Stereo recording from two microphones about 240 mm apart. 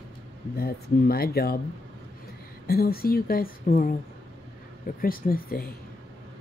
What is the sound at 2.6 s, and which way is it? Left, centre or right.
Speech, left.